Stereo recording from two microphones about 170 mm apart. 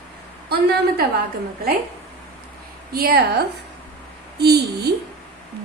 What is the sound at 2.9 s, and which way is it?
Speech, 60° right (ahead or behind).